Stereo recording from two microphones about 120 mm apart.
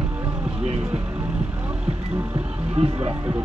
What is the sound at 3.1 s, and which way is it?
Speech, 20° right (ahead or behind).